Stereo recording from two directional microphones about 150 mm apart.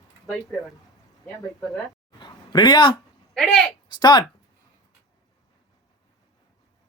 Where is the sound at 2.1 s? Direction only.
30° left (ahead or behind).